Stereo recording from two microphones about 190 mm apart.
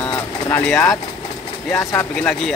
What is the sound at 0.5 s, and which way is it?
Speech, 10° left (ahead or behind).